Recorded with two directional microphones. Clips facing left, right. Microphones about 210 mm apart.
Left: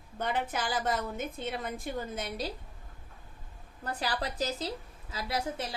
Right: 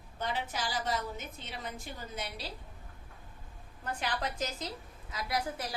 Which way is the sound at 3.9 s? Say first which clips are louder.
Left 2 dB; 35° left (ahead or behind).